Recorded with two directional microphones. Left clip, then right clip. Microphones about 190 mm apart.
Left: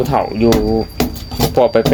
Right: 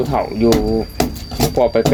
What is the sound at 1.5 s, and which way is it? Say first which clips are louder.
Speech: left 3 dB; 30° left (ahead or behind).